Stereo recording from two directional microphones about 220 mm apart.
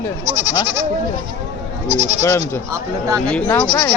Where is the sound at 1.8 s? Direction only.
30° right (ahead or behind).